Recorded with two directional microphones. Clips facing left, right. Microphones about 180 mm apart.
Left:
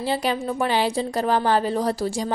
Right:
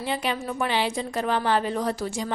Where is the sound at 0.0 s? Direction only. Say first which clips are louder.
Left 4 dB; 35° left (ahead or behind).